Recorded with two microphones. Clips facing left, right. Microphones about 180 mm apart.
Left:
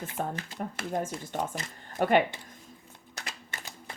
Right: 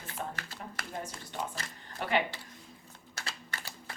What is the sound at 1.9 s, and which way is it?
Speech, 45° left (ahead or behind).